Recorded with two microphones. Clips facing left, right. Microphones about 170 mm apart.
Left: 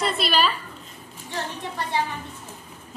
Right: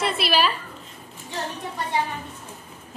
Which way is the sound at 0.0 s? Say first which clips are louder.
Even; 5° right (ahead or behind).